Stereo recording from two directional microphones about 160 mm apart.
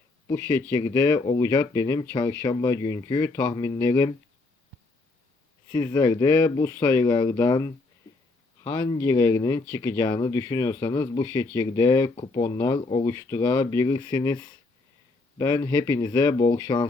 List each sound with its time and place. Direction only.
0.7 s speech: 20° left (ahead or behind)
5.7 s speech: 25° left (ahead or behind)